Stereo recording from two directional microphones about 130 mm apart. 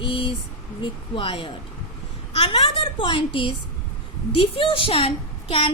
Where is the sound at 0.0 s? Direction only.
40° left (ahead or behind).